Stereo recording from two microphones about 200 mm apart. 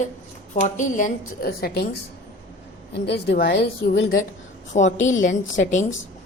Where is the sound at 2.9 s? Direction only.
55° left (ahead or behind).